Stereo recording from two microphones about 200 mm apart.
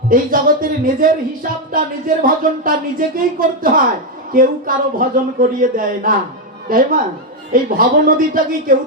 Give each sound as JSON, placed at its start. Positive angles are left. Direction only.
{"t": 0.1, "sound": "speech", "side_deg": -45}